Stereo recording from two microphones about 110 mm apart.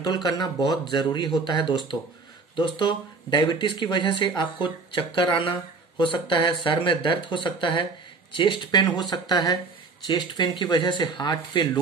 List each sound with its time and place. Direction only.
0.0 s speech: 40° left (ahead or behind)